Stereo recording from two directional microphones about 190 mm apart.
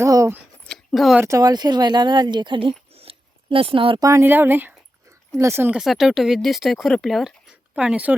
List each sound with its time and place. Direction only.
0.0 s speech: 15° right (ahead or behind)
0.7 s speech: centre (ahead or behind)
1.2 s speech: 20° right (ahead or behind)